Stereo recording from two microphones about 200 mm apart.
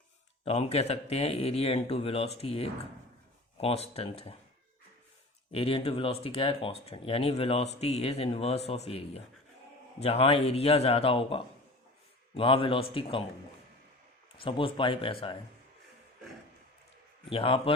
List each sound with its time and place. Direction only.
0.4 s speech: 30° left (ahead or behind)
5.5 s speech: 30° left (ahead or behind)
14.3 s speech: 25° left (ahead or behind)
17.2 s speech: 25° left (ahead or behind)